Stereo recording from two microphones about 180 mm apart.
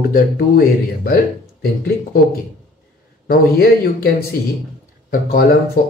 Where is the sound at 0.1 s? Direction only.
55° left (ahead or behind).